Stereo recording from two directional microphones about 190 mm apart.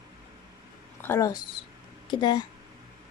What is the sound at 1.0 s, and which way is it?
A woman's voice, 15° left (ahead or behind).